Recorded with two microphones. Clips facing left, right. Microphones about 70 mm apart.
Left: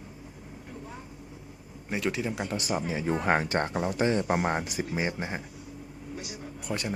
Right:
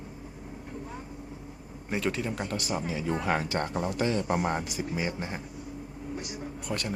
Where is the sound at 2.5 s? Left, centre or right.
Left.